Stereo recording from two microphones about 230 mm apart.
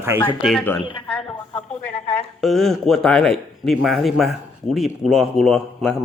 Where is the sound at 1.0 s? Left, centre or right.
Centre.